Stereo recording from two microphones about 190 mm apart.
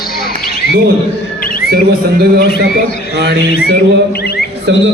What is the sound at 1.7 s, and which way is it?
Speech, 55° right (ahead or behind).